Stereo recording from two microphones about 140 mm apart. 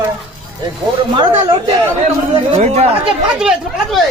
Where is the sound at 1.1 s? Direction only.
40° right (ahead or behind).